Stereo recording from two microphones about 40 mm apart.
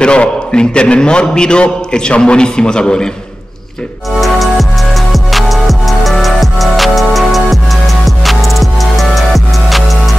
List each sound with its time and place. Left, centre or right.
0.0 s a man's voice: left
4.2 s music: centre